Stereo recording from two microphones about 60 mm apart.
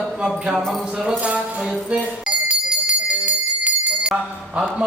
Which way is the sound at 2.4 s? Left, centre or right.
Right.